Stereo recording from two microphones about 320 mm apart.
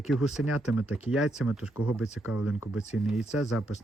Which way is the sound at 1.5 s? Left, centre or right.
Centre.